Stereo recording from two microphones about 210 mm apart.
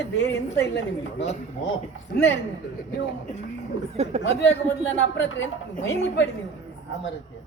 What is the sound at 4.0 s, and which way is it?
Speech, 30° right (ahead or behind).